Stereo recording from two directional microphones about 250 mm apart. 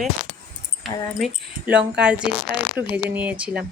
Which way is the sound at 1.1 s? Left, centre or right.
Centre.